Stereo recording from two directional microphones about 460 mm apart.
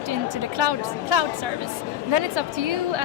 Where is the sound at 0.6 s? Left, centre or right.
Right.